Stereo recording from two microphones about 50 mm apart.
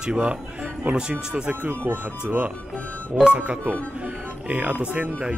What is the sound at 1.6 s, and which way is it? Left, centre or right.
Speech, right.